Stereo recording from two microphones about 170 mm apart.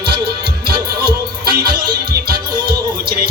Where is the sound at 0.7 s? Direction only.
65° right (ahead or behind).